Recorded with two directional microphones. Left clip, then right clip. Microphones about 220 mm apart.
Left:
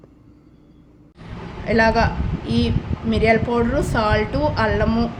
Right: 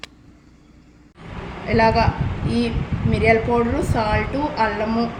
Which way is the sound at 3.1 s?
45° left (ahead or behind).